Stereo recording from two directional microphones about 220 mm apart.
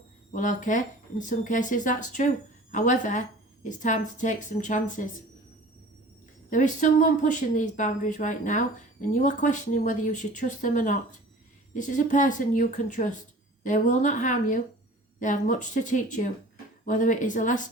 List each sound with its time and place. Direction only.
0.3 s speech: 35° left (ahead or behind)
6.5 s speech: 35° left (ahead or behind)